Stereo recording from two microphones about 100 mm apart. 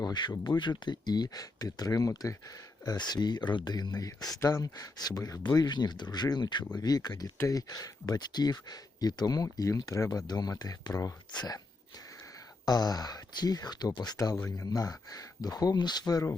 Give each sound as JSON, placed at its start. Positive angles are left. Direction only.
{"t": 0.0, "sound": "speech", "side_deg": 45}
{"t": 12.6, "sound": "speech", "side_deg": 40}